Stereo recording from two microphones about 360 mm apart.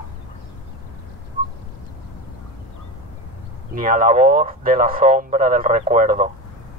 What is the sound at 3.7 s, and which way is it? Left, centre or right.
Speech, right.